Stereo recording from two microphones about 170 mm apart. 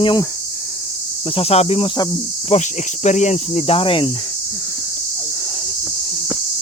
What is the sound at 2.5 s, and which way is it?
Cricket, 45° left (ahead or behind).